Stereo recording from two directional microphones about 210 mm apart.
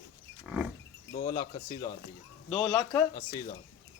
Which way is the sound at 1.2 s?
20° left (ahead or behind).